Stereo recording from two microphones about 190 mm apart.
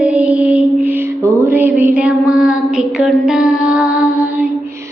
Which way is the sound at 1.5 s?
10° right (ahead or behind).